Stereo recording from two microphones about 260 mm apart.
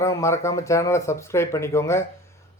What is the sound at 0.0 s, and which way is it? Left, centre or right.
Speech, centre.